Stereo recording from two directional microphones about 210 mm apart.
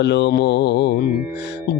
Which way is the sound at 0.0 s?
55° left (ahead or behind).